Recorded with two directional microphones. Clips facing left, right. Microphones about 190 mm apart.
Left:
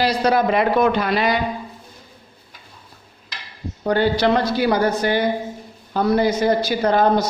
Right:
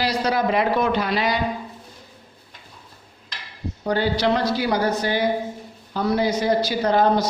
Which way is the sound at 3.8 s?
55° left (ahead or behind).